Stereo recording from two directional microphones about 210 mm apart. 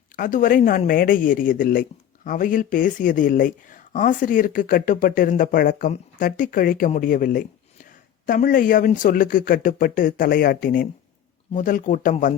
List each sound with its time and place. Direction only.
0.2 s speech: 40° left (ahead or behind)